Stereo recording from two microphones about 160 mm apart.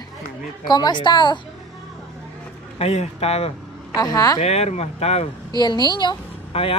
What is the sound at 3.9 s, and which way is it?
Speech, 25° left (ahead or behind).